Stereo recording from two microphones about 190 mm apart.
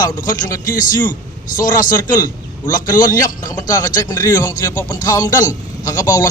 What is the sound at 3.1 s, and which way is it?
A man's voice, 20° left (ahead or behind).